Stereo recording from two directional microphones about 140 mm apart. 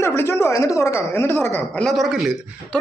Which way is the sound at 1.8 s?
Centre (ahead or behind).